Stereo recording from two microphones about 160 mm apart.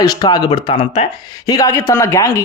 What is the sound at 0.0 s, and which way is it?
A man's voice, 25° left (ahead or behind).